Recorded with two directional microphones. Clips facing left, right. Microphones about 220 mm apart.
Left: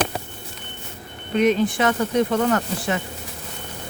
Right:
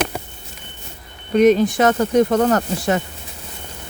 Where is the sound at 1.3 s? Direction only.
40° right (ahead or behind).